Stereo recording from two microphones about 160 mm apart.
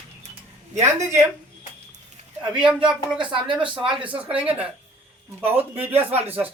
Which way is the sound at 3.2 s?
30° right (ahead or behind).